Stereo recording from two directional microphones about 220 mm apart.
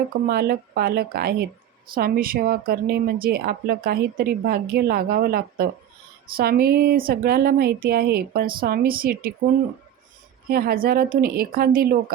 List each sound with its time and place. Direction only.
0.3 s a woman's voice: 45° right (ahead or behind)
10.5 s speech: 40° right (ahead or behind)